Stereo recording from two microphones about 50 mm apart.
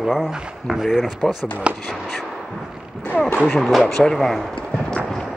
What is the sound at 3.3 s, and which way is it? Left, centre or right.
Speech, centre.